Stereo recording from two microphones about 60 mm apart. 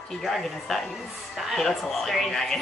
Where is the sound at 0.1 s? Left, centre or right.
Centre.